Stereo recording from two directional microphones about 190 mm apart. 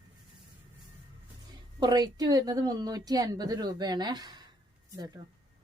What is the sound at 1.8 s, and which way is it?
A woman's voice, 20° right (ahead or behind).